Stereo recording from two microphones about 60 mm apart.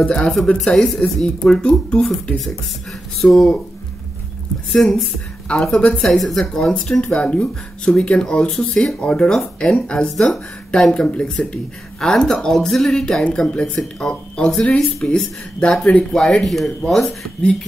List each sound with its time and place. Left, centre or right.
0.0 s speech: centre
2.3 s speech: centre
4.7 s speech: centre
16.1 s speech: centre